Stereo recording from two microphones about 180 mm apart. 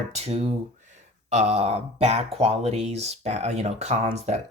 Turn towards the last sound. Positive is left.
turn(degrees=-35)  # may be behind; listen again after turning